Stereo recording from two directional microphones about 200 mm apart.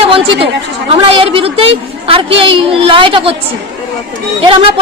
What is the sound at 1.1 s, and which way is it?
A woman's voice, 25° right (ahead or behind).